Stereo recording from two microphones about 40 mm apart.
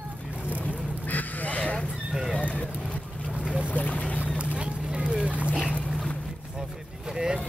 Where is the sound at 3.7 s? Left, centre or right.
Left.